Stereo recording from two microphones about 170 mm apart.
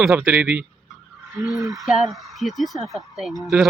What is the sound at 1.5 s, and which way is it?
Owl, 20° right (ahead or behind).